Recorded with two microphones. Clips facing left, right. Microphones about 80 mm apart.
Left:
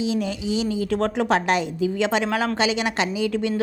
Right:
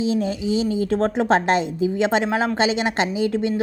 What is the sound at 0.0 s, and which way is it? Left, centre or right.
A woman's voice, right.